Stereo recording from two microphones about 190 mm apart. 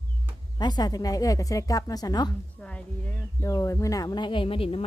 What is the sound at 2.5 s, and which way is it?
Speech, 5° left (ahead or behind).